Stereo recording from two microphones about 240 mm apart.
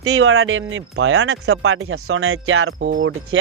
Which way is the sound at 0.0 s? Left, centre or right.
Right.